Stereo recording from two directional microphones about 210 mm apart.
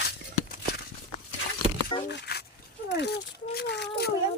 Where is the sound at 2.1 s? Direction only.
50° left (ahead or behind).